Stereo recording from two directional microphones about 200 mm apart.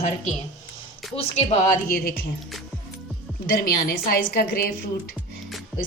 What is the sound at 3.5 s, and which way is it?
A woman's voice, 50° left (ahead or behind).